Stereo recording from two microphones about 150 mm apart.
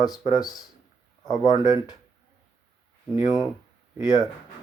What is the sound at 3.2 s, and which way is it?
Speech, 30° left (ahead or behind).